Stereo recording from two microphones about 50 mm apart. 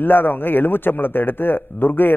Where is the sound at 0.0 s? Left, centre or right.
Left.